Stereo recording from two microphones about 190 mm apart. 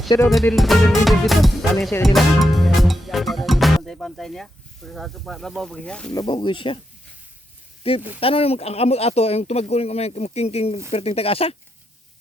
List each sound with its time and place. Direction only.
0.1 s speech: 15° left (ahead or behind)
0.5 s music: centre (ahead or behind)
6.1 s speech: 25° left (ahead or behind)
7.9 s speech: 30° left (ahead or behind)